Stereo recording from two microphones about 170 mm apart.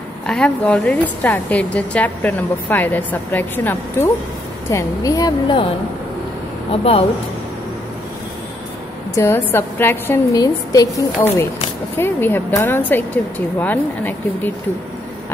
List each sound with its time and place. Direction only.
0.3 s a woman's voice: 5° left (ahead or behind); by 5.6 s 20° left (ahead or behind)
6.7 s speech: 35° left (ahead or behind)
9.1 s a woman's voice: 15° left (ahead or behind)